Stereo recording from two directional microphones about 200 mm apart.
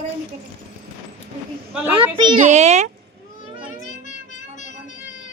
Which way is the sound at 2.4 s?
35° right (ahead or behind).